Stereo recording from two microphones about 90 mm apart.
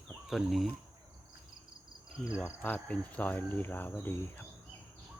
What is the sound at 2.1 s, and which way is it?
Cricket, 10° right (ahead or behind).